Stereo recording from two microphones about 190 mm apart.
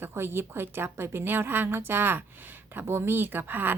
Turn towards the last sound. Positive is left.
turn(degrees=-10)  # may be behind; listen again after turning